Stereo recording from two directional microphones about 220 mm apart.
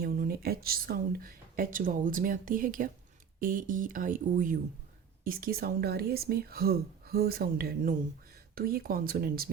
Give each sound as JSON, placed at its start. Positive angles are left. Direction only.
{"t": 0.0, "sound": "speech", "side_deg": -45}